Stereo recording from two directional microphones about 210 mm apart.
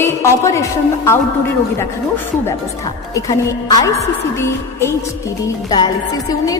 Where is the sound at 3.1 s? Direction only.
15° left (ahead or behind).